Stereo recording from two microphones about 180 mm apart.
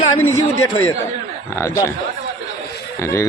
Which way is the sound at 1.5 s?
15° left (ahead or behind).